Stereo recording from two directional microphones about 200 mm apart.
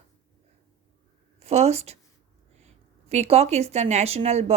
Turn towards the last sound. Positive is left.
turn(degrees=-30)  # may be behind; listen again after turning